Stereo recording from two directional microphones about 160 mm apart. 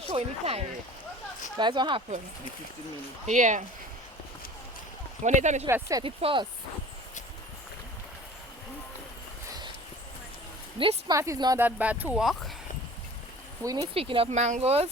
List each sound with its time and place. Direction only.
0.1 s speech: 40° right (ahead or behind)
1.5 s speech: 30° right (ahead or behind)
3.2 s speech: 50° right (ahead or behind)
5.2 s speech: 45° right (ahead or behind)
5.6 s speech: 20° right (ahead or behind)
6.0 s speech: 35° right (ahead or behind)
10.8 s speech: 30° right (ahead or behind)
11.1 s speech: 20° right (ahead or behind)
11.6 s speech: 10° right (ahead or behind)
13.6 s speech: 20° right (ahead or behind)
13.9 s speech: 35° right (ahead or behind)